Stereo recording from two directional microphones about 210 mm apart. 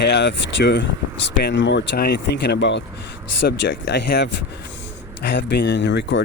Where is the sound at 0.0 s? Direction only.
55° left (ahead or behind).